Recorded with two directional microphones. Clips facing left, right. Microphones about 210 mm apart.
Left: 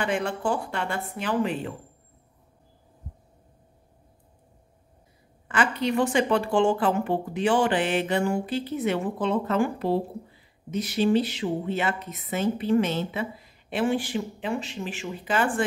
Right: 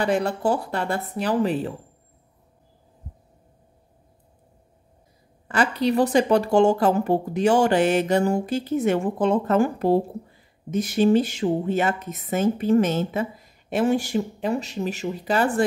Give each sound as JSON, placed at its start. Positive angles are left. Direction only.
{"t": 0.0, "sound": "speech", "side_deg": -40}
{"t": 5.5, "sound": "speech", "side_deg": -35}